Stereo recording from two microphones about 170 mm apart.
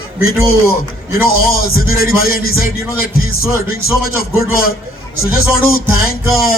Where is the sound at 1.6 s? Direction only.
60° left (ahead or behind).